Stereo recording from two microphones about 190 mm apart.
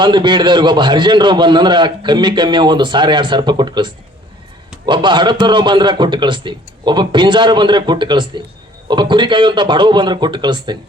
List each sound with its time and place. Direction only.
0.0 s a man's voice: 25° right (ahead or behind)